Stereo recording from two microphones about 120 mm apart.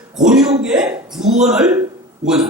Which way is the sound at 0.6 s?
5° right (ahead or behind).